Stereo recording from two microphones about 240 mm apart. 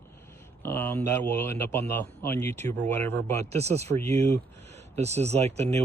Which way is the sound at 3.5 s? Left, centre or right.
Right.